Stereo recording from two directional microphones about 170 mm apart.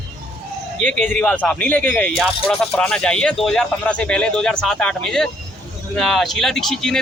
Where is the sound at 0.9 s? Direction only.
45° right (ahead or behind).